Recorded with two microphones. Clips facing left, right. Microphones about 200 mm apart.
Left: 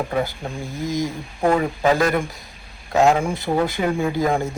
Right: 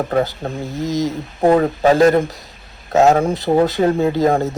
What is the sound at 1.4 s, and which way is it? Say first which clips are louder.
Speech: right 5 dB; 35° right (ahead or behind).